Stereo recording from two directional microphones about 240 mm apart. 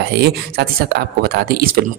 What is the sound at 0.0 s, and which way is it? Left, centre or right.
Speech, right.